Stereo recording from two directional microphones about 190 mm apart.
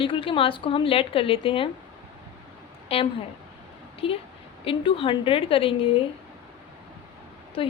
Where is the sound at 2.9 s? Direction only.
30° left (ahead or behind).